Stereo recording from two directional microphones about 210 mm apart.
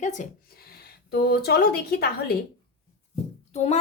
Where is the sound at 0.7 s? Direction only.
50° left (ahead or behind).